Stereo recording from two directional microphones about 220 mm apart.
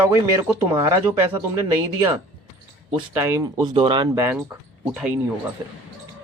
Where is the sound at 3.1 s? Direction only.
15° right (ahead or behind).